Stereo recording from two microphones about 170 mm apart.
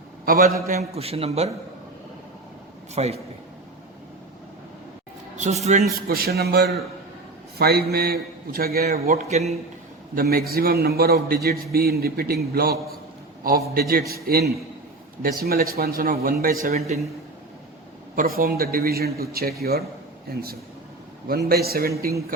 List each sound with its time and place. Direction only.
0.3 s a man's voice: 60° right (ahead or behind)
0.7 s a man's voice: 40° right (ahead or behind)
2.9 s a man's voice: 40° right (ahead or behind)
5.4 s a man's voice: 40° right (ahead or behind)
6.1 s a man's voice: 65° right (ahead or behind)
9.1 s a man's voice: 40° right (ahead or behind)
10.2 s a man's voice: 60° right (ahead or behind)
14.1 s a man's voice: 65° right (ahead or behind)
16.7 s a man's voice: 40° right (ahead or behind)
18.2 s a man's voice: 60° right (ahead or behind)
21.2 s a man's voice: 65° right (ahead or behind)